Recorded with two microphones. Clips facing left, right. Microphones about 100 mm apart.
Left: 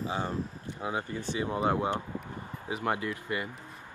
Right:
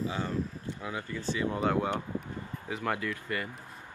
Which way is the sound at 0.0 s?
25° left (ahead or behind).